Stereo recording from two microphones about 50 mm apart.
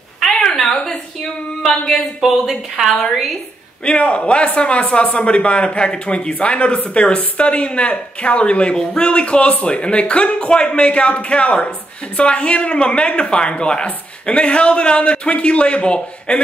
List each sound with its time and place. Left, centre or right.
0.3 s a sound: centre
2.2 s speech: centre
3.8 s a man's voice: left